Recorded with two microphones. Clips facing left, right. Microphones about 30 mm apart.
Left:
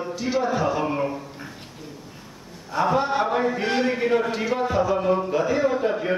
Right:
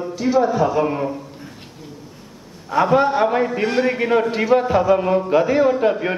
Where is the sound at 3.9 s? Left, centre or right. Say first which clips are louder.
Right 4 dB; right.